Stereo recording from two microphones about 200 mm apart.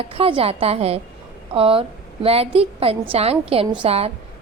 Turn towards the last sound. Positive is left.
turn(degrees=-30)  # may be behind; listen again after turning